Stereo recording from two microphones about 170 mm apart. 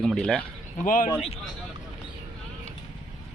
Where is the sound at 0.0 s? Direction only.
5° left (ahead or behind).